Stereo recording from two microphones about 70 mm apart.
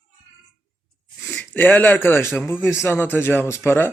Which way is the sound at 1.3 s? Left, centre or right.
Left.